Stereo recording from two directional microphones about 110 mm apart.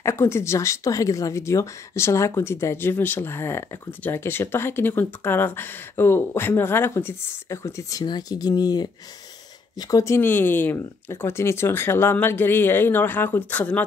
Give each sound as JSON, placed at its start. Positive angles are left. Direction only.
{"t": 0.0, "sound": "a woman's voice", "side_deg": 25}